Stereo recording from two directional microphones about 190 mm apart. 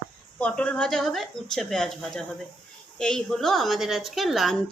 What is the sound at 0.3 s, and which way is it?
A woman's voice, 5° left (ahead or behind).